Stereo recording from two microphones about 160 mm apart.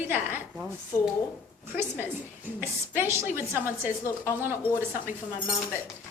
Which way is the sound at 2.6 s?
15° right (ahead or behind).